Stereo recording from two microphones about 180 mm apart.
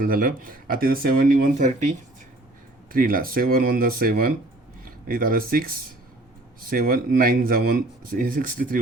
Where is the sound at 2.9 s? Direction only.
50° right (ahead or behind).